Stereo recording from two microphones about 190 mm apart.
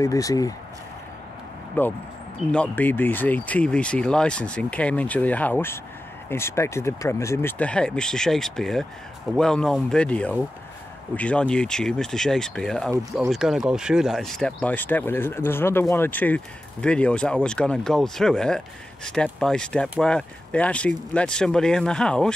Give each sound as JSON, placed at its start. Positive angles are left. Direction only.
{"t": 0.0, "sound": "speech", "side_deg": 15}
{"t": 1.8, "sound": "speech", "side_deg": 10}